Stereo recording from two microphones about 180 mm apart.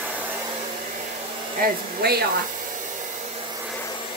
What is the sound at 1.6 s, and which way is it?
Speech, 60° right (ahead or behind).